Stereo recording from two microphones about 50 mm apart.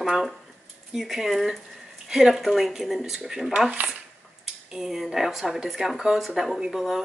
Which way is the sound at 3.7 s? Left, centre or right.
Right.